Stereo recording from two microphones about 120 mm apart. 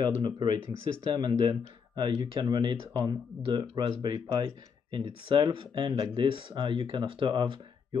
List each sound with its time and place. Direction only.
0.0 s speech: 40° right (ahead or behind)